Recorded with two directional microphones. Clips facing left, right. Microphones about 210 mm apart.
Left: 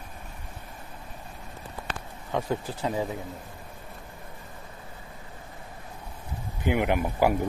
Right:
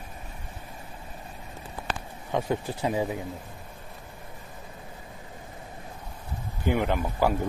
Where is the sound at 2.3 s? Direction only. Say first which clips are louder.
Right 1 dB; 15° right (ahead or behind).